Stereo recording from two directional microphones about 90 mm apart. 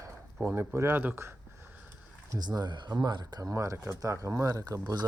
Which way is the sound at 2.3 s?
50° right (ahead or behind).